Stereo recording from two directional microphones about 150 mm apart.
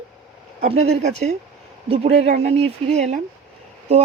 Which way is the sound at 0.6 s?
45° right (ahead or behind).